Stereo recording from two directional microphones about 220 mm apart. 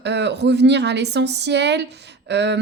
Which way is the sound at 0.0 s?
50° right (ahead or behind).